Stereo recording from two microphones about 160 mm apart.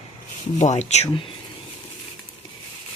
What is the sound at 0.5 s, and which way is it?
Speech, 45° left (ahead or behind).